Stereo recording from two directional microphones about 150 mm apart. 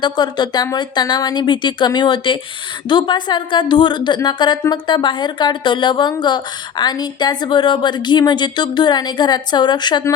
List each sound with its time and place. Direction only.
0.0 s a woman's voice: 30° left (ahead or behind)